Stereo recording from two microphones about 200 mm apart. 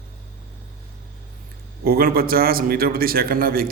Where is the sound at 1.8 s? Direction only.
50° right (ahead or behind).